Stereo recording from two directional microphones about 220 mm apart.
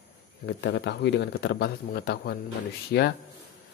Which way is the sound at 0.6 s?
50° left (ahead or behind).